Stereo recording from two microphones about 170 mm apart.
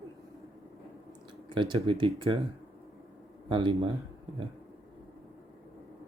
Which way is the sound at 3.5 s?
30° right (ahead or behind).